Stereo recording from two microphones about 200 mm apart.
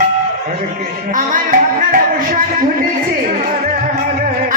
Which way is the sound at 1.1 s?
40° right (ahead or behind).